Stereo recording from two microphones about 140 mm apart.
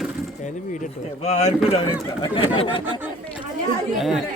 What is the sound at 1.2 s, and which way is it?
Speech, 50° left (ahead or behind).